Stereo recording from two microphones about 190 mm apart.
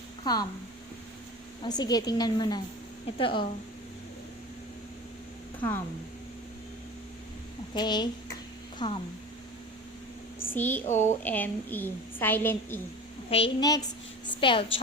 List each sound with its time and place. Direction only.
0.3 s a woman's voice: 20° left (ahead or behind)
1.6 s a woman's voice: 20° left (ahead or behind)
7.7 s a woman's voice: 20° left (ahead or behind)
10.4 s speech: 10° left (ahead or behind)
10.8 s speech: 40° left (ahead or behind)
11.2 s a woman's voice: 10° left (ahead or behind)
13.3 s a woman's voice: 25° left (ahead or behind)